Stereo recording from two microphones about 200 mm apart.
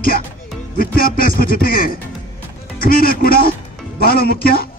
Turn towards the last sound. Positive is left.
turn(degrees=50)  # may be behind; listen again after turning